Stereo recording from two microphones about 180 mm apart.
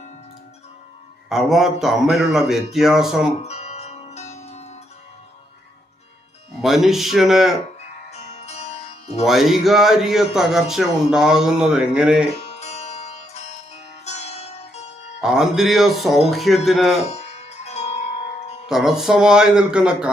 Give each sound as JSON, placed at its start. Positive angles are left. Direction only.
{"t": 1.3, "sound": "speech", "side_deg": 0}
{"t": 3.4, "sound": "music", "side_deg": 40}
{"t": 6.6, "sound": "speech", "side_deg": 0}
{"t": 8.1, "sound": "music", "side_deg": 35}
{"t": 9.2, "sound": "speech", "side_deg": 0}
{"t": 12.3, "sound": "music", "side_deg": 35}
{"t": 15.2, "sound": "speech", "side_deg": 0}
{"t": 17.1, "sound": "music", "side_deg": 35}
{"t": 18.7, "sound": "speech", "side_deg": 0}